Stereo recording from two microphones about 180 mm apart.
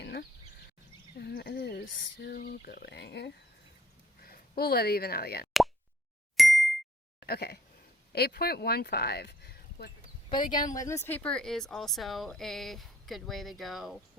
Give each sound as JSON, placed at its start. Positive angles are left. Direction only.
{"t": 0.0, "sound": "a sound", "side_deg": 55}
{"t": 1.1, "sound": "speech", "side_deg": 60}
{"t": 6.3, "sound": "ding", "side_deg": 0}
{"t": 7.3, "sound": "speech", "side_deg": 60}
{"t": 10.8, "sound": "speech", "side_deg": 15}